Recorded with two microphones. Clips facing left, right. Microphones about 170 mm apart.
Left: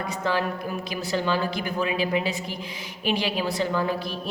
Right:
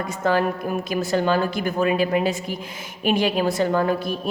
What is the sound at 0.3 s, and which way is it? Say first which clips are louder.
A woman's voice: right 6 dB; 50° right (ahead or behind).